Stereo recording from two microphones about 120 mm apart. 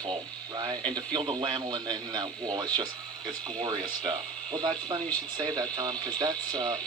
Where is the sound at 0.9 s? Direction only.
40° right (ahead or behind).